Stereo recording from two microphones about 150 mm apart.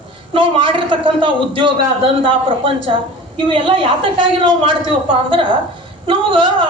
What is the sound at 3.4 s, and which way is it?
A man's voice, 35° right (ahead or behind).